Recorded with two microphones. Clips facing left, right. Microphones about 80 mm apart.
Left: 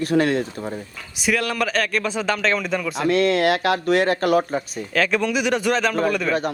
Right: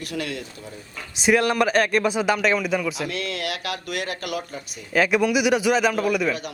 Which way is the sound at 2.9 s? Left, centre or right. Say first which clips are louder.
Left 10 dB; left.